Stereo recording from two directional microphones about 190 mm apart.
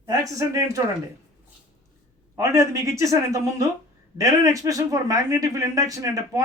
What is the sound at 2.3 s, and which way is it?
Speech, 15° right (ahead or behind).